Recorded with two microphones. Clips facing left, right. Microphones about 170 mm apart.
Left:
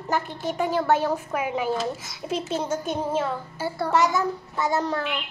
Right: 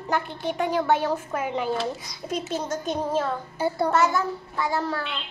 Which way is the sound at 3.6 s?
20° right (ahead or behind).